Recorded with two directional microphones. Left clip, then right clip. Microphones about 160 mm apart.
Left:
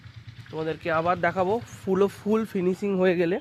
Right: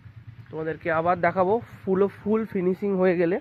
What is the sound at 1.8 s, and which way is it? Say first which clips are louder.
Speech: even; 25° left (ahead or behind).